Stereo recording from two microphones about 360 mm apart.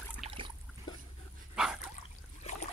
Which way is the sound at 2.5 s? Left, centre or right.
Centre.